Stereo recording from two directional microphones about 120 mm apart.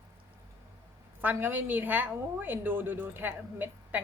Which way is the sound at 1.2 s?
15° right (ahead or behind).